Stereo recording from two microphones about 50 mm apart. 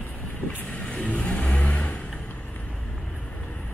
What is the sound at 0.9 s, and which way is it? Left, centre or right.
Vehicle, left.